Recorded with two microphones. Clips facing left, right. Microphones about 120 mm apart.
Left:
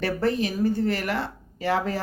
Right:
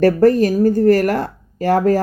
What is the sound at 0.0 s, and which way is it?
Speech, 45° right (ahead or behind).